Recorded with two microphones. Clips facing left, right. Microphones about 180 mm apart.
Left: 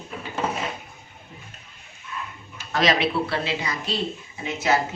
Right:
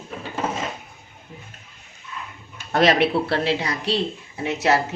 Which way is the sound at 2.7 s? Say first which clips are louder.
Right 4 dB; 60° right (ahead or behind).